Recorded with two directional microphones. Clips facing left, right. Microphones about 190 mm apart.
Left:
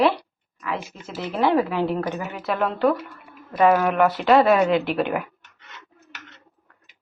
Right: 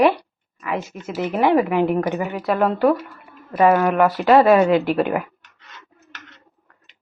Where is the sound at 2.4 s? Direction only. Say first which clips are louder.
Right 3 dB; centre (ahead or behind).